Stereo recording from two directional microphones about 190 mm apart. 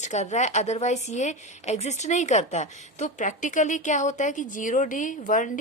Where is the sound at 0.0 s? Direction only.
40° left (ahead or behind).